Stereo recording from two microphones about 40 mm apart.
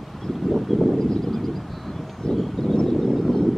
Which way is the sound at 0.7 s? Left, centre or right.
Centre.